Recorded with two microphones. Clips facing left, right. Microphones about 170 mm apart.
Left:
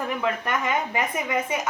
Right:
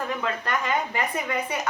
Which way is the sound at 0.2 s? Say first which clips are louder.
Left 2 dB; 20° left (ahead or behind).